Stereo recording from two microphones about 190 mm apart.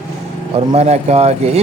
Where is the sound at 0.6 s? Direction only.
35° right (ahead or behind).